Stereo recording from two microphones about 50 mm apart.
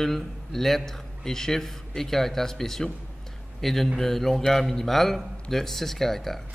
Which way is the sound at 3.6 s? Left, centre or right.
Centre.